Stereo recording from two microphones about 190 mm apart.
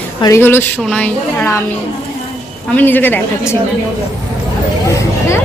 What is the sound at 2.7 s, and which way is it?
Speech, 10° left (ahead or behind).